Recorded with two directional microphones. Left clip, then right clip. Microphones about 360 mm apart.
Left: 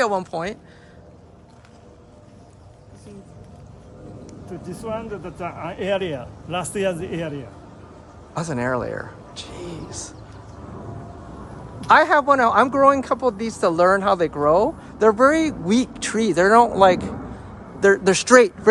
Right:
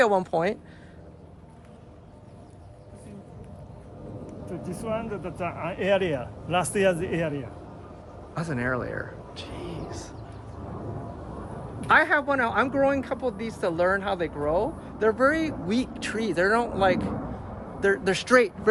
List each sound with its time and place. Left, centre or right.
0.0 s speech: centre
4.7 s speech: centre
11.8 s speech: centre